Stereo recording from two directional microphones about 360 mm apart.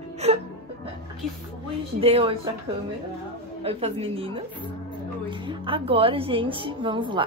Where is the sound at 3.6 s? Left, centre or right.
Centre.